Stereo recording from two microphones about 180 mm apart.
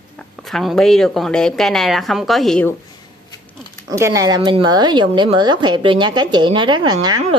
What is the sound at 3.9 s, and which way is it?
Speech, 15° right (ahead or behind).